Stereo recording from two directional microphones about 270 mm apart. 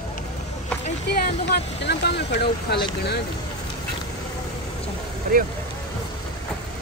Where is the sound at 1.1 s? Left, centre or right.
Left.